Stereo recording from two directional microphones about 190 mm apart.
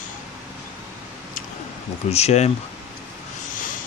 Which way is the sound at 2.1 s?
35° left (ahead or behind).